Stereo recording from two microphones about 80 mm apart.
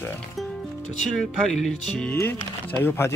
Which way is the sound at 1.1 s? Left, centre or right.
Centre.